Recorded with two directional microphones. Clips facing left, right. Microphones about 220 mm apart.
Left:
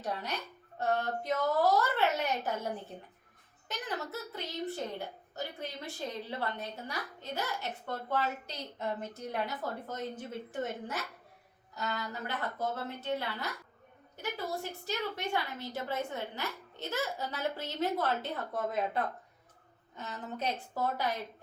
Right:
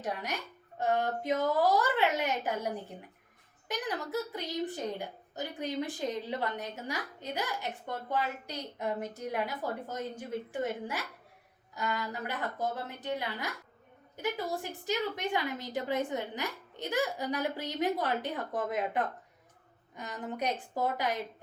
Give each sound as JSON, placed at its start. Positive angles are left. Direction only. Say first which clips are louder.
{"t": 0.8, "sound": "a woman's voice", "louder": "right 2 dB", "side_deg": -15}
{"t": 12.2, "sound": "a woman's voice", "louder": "left 1 dB", "side_deg": -15}